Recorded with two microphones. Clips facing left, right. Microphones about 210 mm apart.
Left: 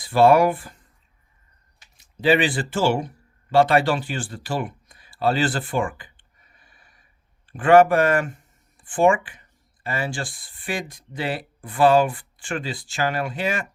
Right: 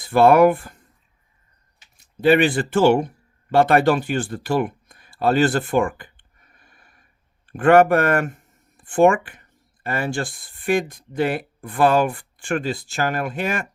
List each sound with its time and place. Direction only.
0.0 s speech: 55° right (ahead or behind)
2.2 s speech: 55° right (ahead or behind)
6.0 s a sound: 50° right (ahead or behind)
7.4 s speech: 60° right (ahead or behind)